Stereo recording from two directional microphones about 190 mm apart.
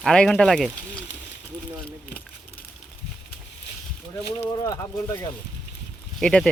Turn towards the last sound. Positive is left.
turn(degrees=5)  # may be behind; listen again after turning